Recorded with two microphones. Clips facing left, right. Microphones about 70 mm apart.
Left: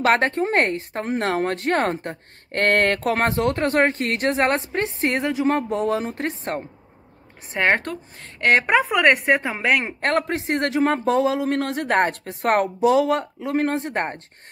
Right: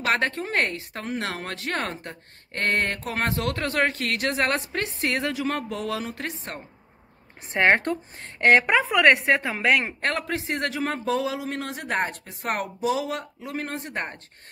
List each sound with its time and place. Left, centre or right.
0.0 s speech: left
2.6 s a man's voice: left
3.2 s speech: left
7.5 s speech: centre
7.9 s speech: right
8.6 s a woman's voice: centre
10.0 s a man's voice: left